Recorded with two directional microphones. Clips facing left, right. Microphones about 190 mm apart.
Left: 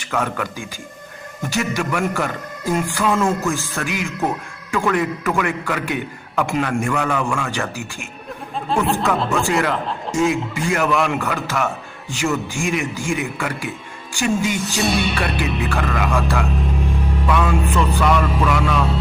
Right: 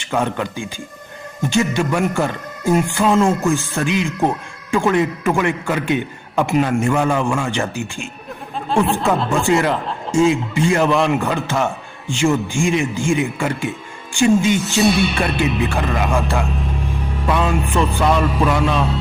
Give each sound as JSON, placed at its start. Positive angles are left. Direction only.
{"t": 0.0, "sound": "a man's voice", "side_deg": -25}
{"t": 8.7, "sound": "speech", "side_deg": 0}
{"t": 9.3, "sound": "a man's voice", "side_deg": -25}